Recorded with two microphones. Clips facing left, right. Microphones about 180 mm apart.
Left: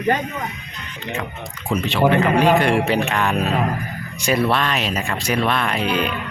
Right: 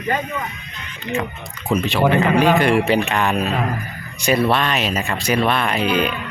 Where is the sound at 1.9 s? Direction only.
10° right (ahead or behind).